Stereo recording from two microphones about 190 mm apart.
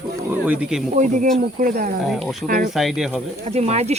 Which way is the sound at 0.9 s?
40° right (ahead or behind).